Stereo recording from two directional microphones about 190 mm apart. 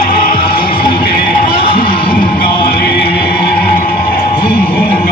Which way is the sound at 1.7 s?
50° left (ahead or behind).